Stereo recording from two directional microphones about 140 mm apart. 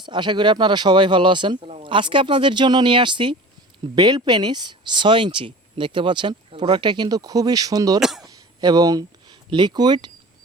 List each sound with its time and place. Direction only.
0.0 s speech: 35° right (ahead or behind)
8.2 s a sound: 30° right (ahead or behind)
9.5 s speech: 30° right (ahead or behind)